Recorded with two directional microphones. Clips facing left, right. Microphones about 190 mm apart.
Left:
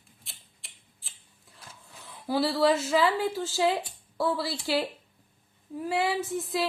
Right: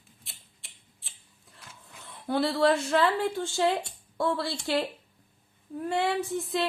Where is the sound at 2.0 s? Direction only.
Centre (ahead or behind).